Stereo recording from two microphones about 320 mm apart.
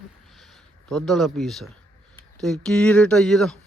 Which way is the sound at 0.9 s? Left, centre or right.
Centre.